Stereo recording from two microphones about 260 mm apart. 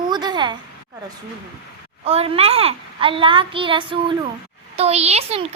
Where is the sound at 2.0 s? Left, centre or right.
Right.